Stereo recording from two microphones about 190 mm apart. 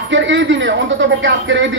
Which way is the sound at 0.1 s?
75° right (ahead or behind).